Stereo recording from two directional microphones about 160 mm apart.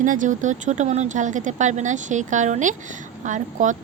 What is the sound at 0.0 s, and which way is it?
A woman's voice, 55° right (ahead or behind).